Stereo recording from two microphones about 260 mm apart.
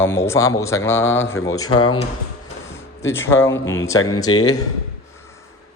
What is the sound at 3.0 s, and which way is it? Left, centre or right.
Speech, centre.